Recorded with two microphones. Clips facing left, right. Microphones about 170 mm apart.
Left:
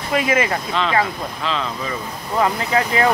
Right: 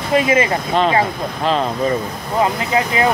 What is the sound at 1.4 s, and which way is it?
Speech, 50° right (ahead or behind).